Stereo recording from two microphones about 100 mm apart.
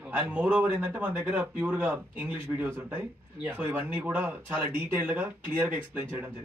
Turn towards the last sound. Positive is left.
turn(degrees=-20)  # may be behind; listen again after turning